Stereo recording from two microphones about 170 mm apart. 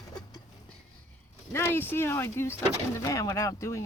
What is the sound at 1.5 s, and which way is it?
Speech, 15° left (ahead or behind).